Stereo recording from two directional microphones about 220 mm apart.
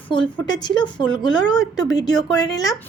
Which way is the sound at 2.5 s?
15° left (ahead or behind).